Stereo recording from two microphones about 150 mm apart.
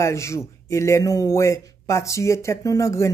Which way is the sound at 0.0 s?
20° left (ahead or behind).